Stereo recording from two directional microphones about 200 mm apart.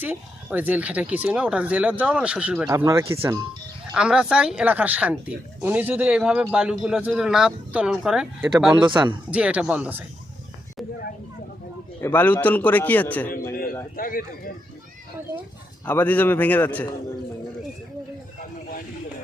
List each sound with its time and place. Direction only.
0.0 s speech: 10° right (ahead or behind)
11.9 s a man's voice: 10° left (ahead or behind)
13.9 s speech: 45° left (ahead or behind)
15.9 s a man's voice: 10° left (ahead or behind)